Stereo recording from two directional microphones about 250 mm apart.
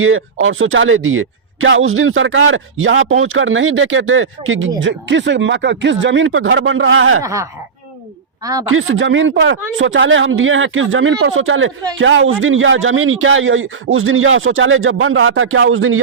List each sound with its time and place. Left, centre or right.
0.0 s speech: right
7.2 s speech: centre
8.7 s speech: right